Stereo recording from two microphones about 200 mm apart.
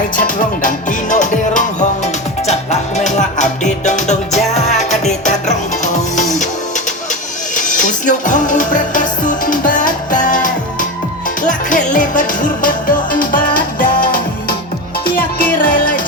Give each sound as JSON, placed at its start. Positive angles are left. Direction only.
{"t": 0.2, "sound": "music", "side_deg": 40}
{"t": 7.5, "sound": "music", "side_deg": 40}